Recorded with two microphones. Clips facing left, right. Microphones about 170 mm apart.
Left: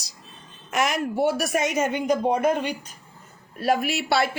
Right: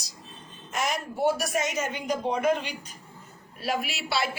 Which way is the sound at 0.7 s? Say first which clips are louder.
Left 6 dB; 80° left.